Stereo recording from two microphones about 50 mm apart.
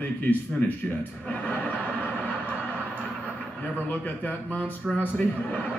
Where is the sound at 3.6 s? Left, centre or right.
Left.